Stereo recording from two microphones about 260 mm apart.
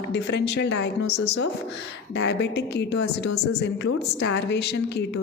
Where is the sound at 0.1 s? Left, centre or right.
Left.